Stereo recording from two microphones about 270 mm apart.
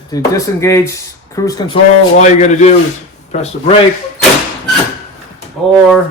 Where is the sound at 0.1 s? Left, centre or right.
Centre.